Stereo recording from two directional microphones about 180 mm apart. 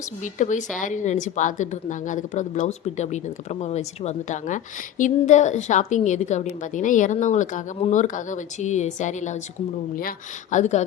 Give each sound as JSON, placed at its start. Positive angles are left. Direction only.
{"t": 0.2, "sound": "a woman's voice", "side_deg": 45}